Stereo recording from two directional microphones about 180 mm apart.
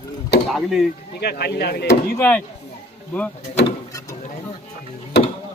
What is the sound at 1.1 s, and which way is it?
Speech, 60° left (ahead or behind).